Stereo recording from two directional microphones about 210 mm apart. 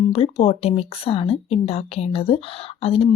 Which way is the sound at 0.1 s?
30° left (ahead or behind).